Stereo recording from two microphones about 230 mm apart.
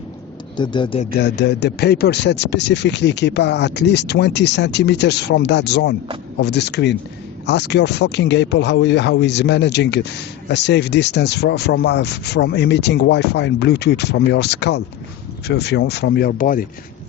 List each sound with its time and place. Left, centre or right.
0.5 s speech: centre
1.2 s speech: left